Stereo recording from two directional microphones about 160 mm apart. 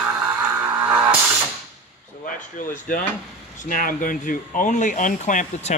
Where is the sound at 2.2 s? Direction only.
55° left (ahead or behind).